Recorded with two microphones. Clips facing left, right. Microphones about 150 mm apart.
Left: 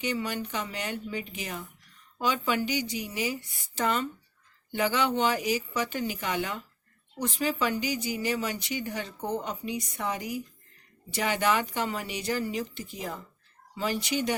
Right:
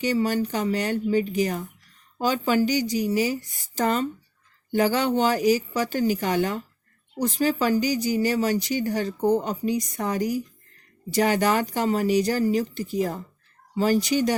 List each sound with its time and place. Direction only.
0.0 s a woman's voice: 35° right (ahead or behind)